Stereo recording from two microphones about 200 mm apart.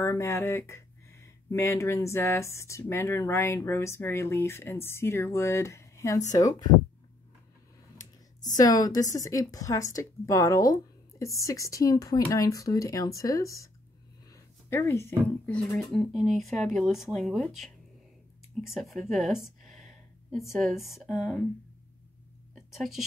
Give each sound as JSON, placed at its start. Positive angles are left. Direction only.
{"t": 0.0, "sound": "speech", "side_deg": 15}
{"t": 8.5, "sound": "speech", "side_deg": 15}
{"t": 14.3, "sound": "a sound", "side_deg": 15}
{"t": 15.2, "sound": "speech", "side_deg": 5}
{"t": 22.8, "sound": "speech", "side_deg": 0}